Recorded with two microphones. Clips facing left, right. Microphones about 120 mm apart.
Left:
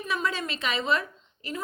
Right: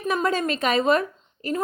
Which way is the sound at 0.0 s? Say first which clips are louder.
Right 7 dB; 45° right (ahead or behind).